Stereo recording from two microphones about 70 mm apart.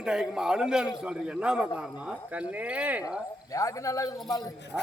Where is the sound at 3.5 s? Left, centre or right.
Left.